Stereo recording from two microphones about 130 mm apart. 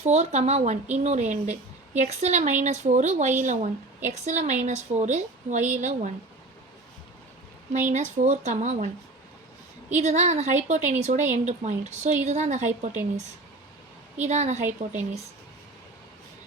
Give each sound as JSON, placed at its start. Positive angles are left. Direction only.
{"t": 0.0, "sound": "speech", "side_deg": -60}
{"t": 7.7, "sound": "speech", "side_deg": -70}
{"t": 9.9, "sound": "speech", "side_deg": -65}